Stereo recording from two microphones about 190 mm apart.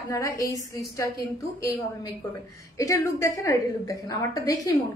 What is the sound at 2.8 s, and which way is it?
A woman's voice, 15° left (ahead or behind).